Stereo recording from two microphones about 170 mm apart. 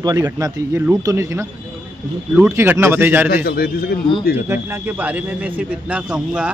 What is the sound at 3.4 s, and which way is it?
Speech, 65° left (ahead or behind).